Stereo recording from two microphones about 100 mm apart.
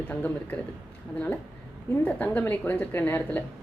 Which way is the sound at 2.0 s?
15° left (ahead or behind).